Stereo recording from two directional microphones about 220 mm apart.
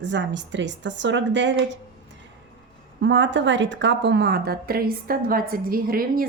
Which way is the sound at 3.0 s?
55° right (ahead or behind).